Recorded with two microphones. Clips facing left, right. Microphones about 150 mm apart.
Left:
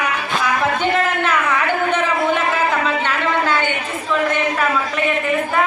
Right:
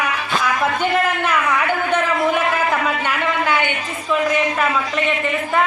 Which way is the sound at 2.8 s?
10° right (ahead or behind).